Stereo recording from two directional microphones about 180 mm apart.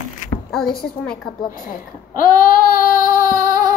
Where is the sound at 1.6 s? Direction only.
50° left (ahead or behind).